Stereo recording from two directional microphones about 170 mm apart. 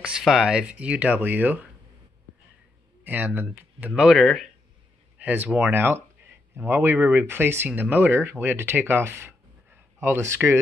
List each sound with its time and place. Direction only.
0.0 s speech: 5° right (ahead or behind)
3.0 s speech: 10° right (ahead or behind)